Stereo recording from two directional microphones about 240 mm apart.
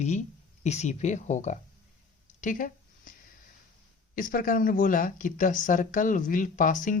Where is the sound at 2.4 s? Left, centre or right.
Left.